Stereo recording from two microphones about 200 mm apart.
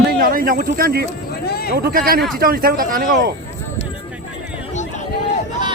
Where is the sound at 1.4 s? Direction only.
50° left (ahead or behind).